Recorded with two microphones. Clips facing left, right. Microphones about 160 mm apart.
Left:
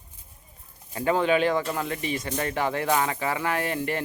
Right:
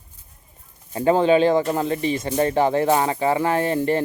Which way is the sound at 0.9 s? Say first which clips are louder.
Right 6 dB; 30° right (ahead or behind).